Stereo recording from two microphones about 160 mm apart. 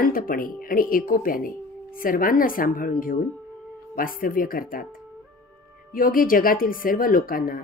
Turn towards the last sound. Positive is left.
turn(degrees=65)  # may be behind; listen again after turning